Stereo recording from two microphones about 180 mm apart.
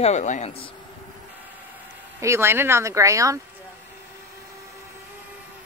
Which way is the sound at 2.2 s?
15° right (ahead or behind).